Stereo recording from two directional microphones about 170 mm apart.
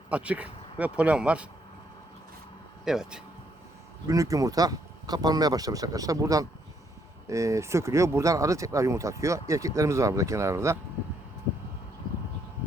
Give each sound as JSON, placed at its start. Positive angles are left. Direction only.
{"t": 0.1, "sound": "speech", "side_deg": -10}
{"t": 2.8, "sound": "speech", "side_deg": -5}
{"t": 4.1, "sound": "speech", "side_deg": -20}